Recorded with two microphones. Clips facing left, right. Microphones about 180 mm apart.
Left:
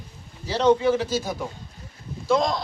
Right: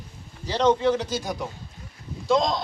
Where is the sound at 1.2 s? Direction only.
15° right (ahead or behind).